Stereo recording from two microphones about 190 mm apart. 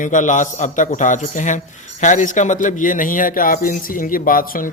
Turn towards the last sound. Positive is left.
turn(degrees=45)  # may be behind; listen again after turning